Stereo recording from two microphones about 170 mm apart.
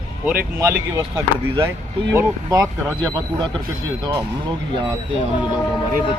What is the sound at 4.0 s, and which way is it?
Speech, 25° right (ahead or behind).